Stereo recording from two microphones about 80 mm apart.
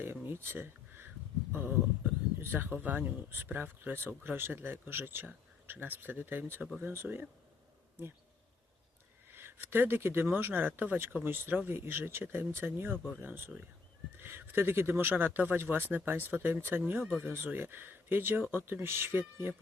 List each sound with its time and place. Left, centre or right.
0.0 s a sound: right
2.4 s speech: right
9.3 s speech: right